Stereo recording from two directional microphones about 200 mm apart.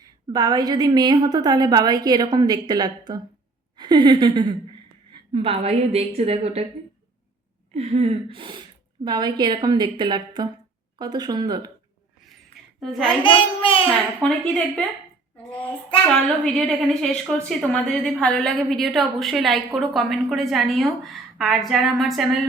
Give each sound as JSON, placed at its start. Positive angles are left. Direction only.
{"t": 0.0, "sound": "a woman's voice", "side_deg": -20}
{"t": 7.7, "sound": "a woman's voice", "side_deg": -30}
{"t": 12.8, "sound": "a woman's voice", "side_deg": 5}
{"t": 13.2, "sound": "a child's voice", "side_deg": 25}
{"t": 14.2, "sound": "a woman's voice", "side_deg": 5}
{"t": 16.0, "sound": "a woman's voice", "side_deg": 5}